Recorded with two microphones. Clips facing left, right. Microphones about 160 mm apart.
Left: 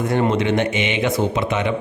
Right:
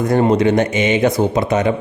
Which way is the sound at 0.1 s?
40° right (ahead or behind).